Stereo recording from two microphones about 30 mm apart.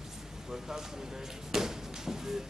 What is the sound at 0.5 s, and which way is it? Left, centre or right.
Speech, centre.